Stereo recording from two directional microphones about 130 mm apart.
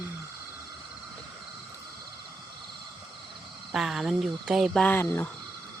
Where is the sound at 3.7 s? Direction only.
5° right (ahead or behind).